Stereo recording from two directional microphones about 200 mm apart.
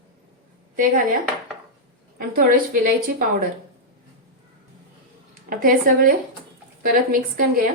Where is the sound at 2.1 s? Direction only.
45° right (ahead or behind).